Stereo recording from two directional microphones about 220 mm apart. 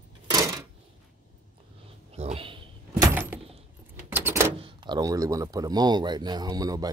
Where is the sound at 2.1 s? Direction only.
30° right (ahead or behind).